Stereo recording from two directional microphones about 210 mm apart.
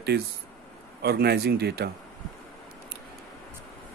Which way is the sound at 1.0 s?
50° right (ahead or behind).